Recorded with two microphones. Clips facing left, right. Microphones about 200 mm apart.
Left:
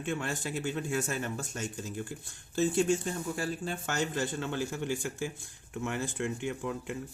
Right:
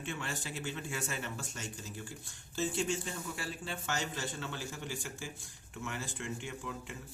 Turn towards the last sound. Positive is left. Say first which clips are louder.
# left 8 dB
turn(degrees=60)  # may be behind; listen again after turning